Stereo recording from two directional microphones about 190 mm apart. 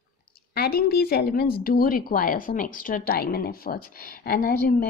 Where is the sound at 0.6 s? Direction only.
55° left (ahead or behind).